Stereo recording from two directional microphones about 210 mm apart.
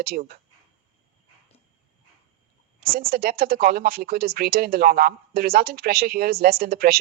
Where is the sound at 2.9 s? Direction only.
45° right (ahead or behind).